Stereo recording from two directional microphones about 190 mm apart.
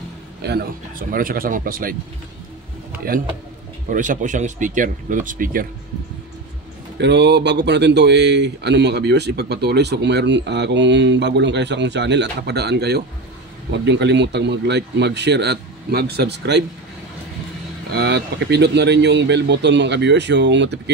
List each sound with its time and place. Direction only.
0.4 s speech: 55° right (ahead or behind)
3.9 s speech: 40° right (ahead or behind)
7.0 s speech: 65° right (ahead or behind)
17.9 s speech: 65° right (ahead or behind)